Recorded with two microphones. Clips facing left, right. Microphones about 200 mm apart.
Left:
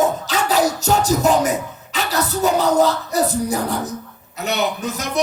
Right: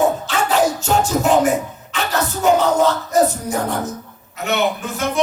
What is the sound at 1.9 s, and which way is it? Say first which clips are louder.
Speech: even; 35° left (ahead or behind).